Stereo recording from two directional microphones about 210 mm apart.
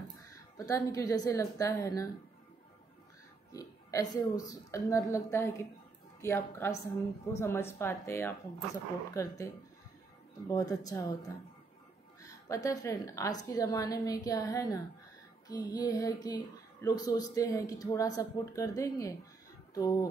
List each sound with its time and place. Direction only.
0.6 s a woman's voice: 15° left (ahead or behind)
3.5 s a woman's voice: 15° left (ahead or behind)
10.5 s a woman's voice: 15° left (ahead or behind)